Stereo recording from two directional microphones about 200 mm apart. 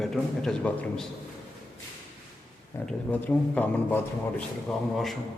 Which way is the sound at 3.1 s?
10° left (ahead or behind).